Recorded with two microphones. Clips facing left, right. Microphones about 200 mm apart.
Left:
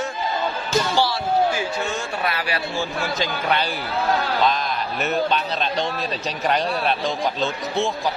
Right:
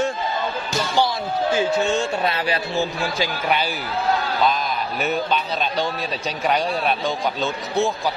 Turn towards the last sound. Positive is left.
turn(degrees=0)  # may be behind; listen again after turning